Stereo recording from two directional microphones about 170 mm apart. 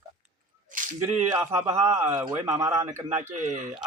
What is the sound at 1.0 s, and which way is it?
Speech, 15° right (ahead or behind).